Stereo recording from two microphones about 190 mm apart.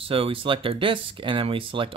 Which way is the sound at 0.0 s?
30° right (ahead or behind).